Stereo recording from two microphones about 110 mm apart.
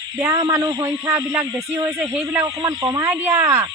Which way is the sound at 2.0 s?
10° right (ahead or behind).